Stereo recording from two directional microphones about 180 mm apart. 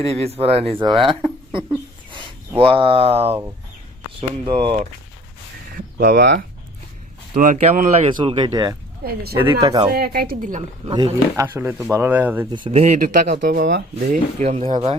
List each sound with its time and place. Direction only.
0.0 s speech: 35° right (ahead or behind)
5.7 s speech: 55° right (ahead or behind); by 8.7 s 25° right (ahead or behind)
9.0 s speech: 60° right (ahead or behind)
9.6 s speech: 20° right (ahead or behind)
9.9 s speech: 60° right (ahead or behind)
10.9 s speech: 25° right (ahead or behind)
12.5 s speech: 30° right (ahead or behind)
13.0 s speech: 50° right (ahead or behind)
13.7 s speech: 70° right (ahead or behind)
14.1 s speech: 35° right (ahead or behind)